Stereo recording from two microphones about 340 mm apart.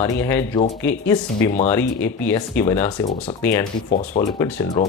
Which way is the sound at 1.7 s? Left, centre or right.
Centre.